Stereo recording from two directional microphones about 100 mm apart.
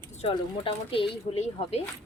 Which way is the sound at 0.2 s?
75° left (ahead or behind).